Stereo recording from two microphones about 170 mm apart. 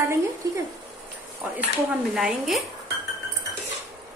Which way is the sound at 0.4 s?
20° right (ahead or behind).